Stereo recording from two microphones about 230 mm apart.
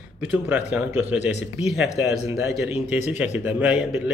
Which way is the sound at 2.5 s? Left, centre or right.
Centre.